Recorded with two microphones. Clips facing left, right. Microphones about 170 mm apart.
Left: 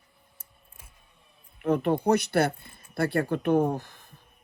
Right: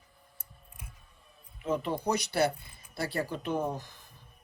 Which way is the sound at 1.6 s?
60° left (ahead or behind).